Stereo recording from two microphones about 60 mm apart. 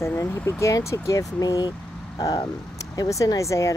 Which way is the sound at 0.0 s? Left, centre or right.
Left.